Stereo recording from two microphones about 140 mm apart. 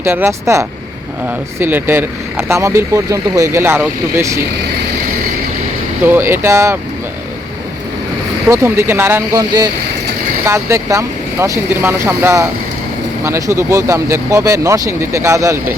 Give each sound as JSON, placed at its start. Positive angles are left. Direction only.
{"t": 0.0, "sound": "speech", "side_deg": -15}
{"t": 6.1, "sound": "speech", "side_deg": -15}
{"t": 8.4, "sound": "speech", "side_deg": -20}
{"t": 10.4, "sound": "speech", "side_deg": -20}